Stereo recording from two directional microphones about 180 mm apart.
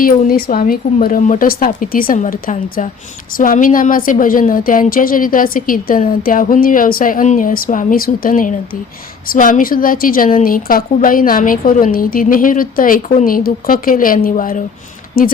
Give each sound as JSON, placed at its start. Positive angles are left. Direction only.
{"t": 0.0, "sound": "a woman's voice", "side_deg": 55}